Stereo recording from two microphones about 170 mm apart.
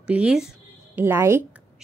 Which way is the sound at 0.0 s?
5° right (ahead or behind).